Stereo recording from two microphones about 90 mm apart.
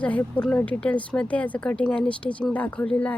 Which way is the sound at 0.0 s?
15° left (ahead or behind).